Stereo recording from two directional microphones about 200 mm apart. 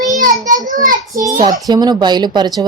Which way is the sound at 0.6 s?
40° right (ahead or behind).